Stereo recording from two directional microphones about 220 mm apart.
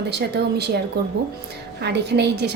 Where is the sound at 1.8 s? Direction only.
50° right (ahead or behind).